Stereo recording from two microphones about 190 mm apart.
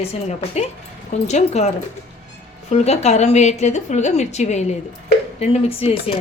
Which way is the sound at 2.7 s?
35° left (ahead or behind).